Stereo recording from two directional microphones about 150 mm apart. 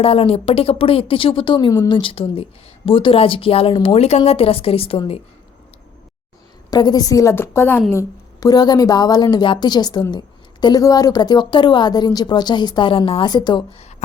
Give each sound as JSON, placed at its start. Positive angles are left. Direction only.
{"t": 0.0, "sound": "a woman's voice", "side_deg": 40}
{"t": 6.7, "sound": "a woman's voice", "side_deg": 30}